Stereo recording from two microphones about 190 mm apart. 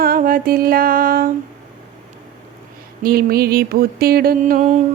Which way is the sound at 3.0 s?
50° right (ahead or behind).